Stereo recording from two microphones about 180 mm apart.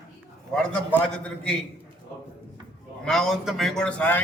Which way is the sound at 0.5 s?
5° left (ahead or behind).